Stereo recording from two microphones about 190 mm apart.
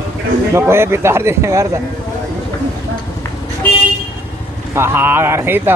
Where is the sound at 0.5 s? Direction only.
15° right (ahead or behind).